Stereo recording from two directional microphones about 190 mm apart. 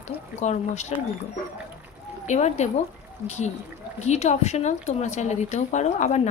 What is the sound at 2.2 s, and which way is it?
Speech, 35° left (ahead or behind).